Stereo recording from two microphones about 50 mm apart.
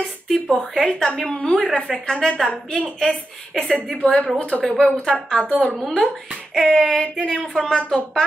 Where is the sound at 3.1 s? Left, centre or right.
Centre.